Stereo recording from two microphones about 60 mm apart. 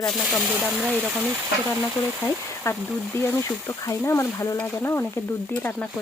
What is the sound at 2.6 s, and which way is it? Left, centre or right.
Speech, left.